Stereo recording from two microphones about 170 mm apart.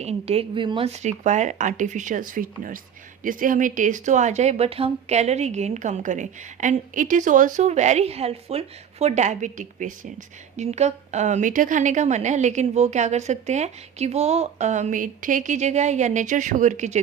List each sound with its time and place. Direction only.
0.0 s a woman's voice: 35° right (ahead or behind)
1.0 s speech: 45° right (ahead or behind)